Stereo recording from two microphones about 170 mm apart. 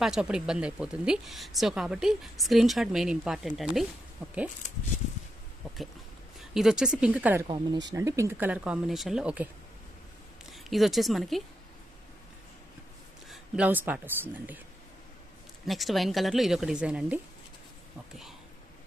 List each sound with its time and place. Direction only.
0.0 s a woman's voice: 5° right (ahead or behind)
6.5 s a woman's voice: 5° right (ahead or behind)
7.4 s speech: 30° right (ahead or behind)
7.9 s speech: 15° right (ahead or behind)
10.5 s a woman's voice: centre (ahead or behind)
13.3 s speech: 10° right (ahead or behind)
15.6 s a woman's voice: centre (ahead or behind)